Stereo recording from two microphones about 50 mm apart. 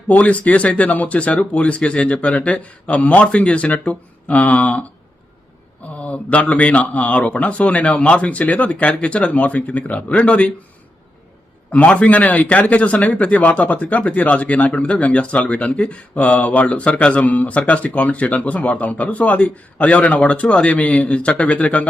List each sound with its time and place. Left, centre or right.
0.1 s speech: left
6.0 s speech: left
11.7 s speech: left